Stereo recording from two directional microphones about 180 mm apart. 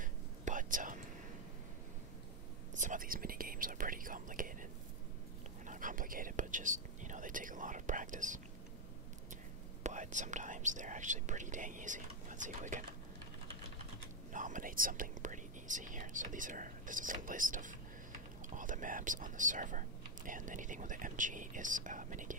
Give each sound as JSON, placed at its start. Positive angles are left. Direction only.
{"t": 0.0, "sound": "whispering", "side_deg": -45}
{"t": 2.7, "sound": "whispering", "side_deg": -45}
{"t": 5.7, "sound": "whispering", "side_deg": -45}
{"t": 9.8, "sound": "speech", "side_deg": -45}
{"t": 14.3, "sound": "speech", "side_deg": -45}